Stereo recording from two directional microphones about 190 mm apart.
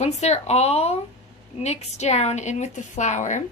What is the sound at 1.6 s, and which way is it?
A woman's voice, 35° left (ahead or behind).